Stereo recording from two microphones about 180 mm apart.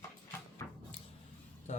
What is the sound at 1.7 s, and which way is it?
Speech, 40° left (ahead or behind).